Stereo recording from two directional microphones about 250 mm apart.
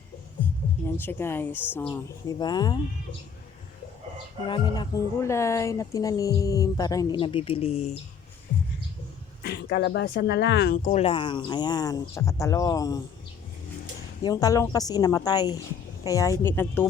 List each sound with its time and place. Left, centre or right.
0.9 s a woman's voice: centre
4.4 s a woman's voice: centre
9.4 s speech: left
11.0 s a woman's voice: centre
14.2 s a woman's voice: centre